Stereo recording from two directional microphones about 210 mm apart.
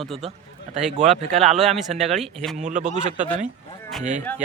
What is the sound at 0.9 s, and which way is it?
Speech, 35° right (ahead or behind).